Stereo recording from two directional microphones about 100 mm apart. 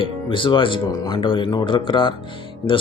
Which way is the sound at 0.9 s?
40° left (ahead or behind).